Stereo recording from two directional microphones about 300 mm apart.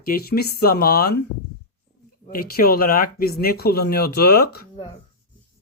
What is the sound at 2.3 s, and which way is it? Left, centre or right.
Speech, left.